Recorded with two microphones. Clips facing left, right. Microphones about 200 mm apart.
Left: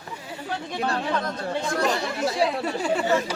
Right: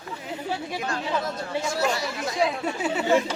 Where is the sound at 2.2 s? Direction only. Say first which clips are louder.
Left 3 dB; 35° left (ahead or behind).